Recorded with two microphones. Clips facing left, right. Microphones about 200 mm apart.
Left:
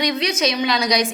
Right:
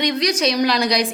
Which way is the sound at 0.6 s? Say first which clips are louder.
Right 3 dB; centre (ahead or behind).